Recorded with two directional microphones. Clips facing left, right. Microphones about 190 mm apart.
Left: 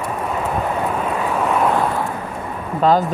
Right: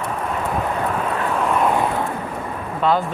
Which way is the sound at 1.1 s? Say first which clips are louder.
Left 1 dB; 10° left (ahead or behind).